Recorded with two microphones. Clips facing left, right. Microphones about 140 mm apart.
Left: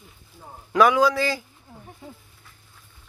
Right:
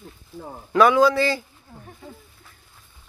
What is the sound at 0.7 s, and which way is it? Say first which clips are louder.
Speech: right 2 dB; 10° left (ahead or behind).